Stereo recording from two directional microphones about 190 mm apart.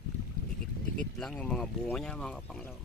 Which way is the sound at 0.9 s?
5° left (ahead or behind).